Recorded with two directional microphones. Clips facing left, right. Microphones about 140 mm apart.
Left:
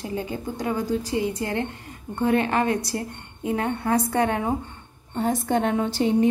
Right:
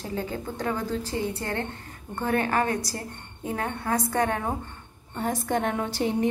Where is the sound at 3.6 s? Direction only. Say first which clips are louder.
Left 4 dB; 30° left (ahead or behind).